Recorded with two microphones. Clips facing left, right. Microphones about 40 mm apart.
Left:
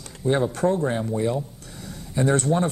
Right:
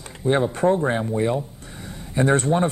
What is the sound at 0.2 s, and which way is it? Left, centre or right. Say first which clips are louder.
Speech: right 2 dB; right.